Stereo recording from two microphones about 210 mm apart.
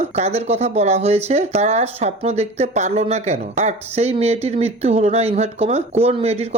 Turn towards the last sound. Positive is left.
turn(degrees=-30)  # may be behind; listen again after turning